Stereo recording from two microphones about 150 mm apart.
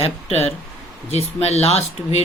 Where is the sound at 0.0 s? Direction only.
40° left (ahead or behind).